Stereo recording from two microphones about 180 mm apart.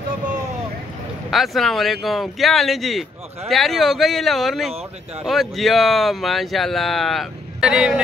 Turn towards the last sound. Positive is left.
turn(degrees=-5)  # may be behind; listen again after turning